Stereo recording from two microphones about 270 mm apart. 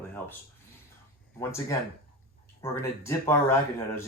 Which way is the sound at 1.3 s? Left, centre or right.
Centre.